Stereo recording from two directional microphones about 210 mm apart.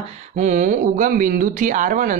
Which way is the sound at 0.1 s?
35° right (ahead or behind).